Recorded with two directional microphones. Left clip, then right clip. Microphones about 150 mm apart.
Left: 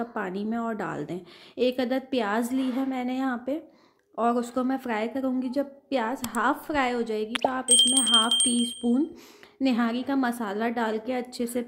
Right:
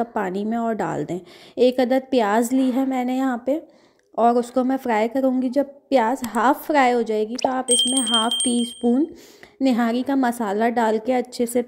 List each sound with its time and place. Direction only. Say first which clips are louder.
0.0 s a woman's voice: right 7 dB; 35° right (ahead or behind)
7.6 s speech: right 1 dB; centre (ahead or behind)
9.6 s a woman's voice: right 6 dB; 30° right (ahead or behind)